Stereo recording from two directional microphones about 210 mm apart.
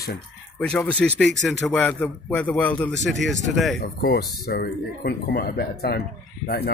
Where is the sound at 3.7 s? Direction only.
50° left (ahead or behind).